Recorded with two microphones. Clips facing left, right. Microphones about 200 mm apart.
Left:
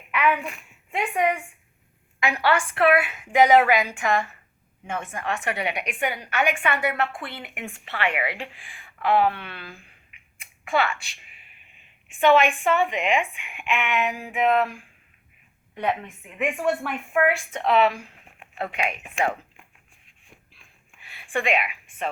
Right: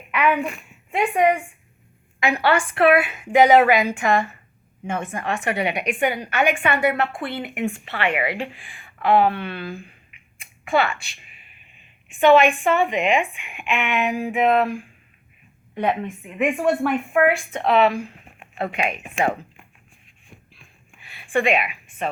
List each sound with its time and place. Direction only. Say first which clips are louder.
0.1 s a child's voice: right 3 dB; 60° right (ahead or behind)
2.2 s a woman's voice: right 3 dB; 25° right (ahead or behind)
12.2 s a woman's voice: right 4 dB; 15° right (ahead or behind)
16.4 s speech: right 5 dB; 45° right (ahead or behind)
17.7 s a woman's voice: right 3 dB; 30° right (ahead or behind)
21.3 s a woman's voice: right 4 dB; 25° right (ahead or behind)